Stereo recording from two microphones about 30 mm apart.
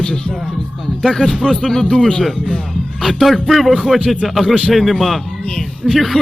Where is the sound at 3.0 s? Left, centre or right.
Centre.